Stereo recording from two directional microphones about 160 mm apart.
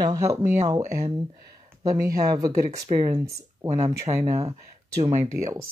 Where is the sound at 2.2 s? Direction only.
25° right (ahead or behind).